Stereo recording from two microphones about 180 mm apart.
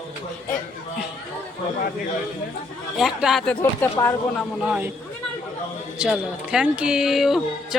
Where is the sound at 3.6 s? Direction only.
15° left (ahead or behind).